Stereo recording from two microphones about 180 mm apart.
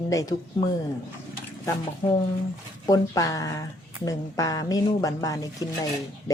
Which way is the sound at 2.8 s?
20° left (ahead or behind).